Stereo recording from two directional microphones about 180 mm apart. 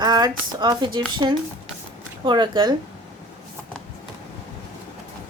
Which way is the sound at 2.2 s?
25° right (ahead or behind).